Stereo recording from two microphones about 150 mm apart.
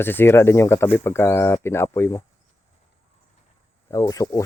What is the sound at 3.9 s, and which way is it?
Speech, 20° left (ahead or behind).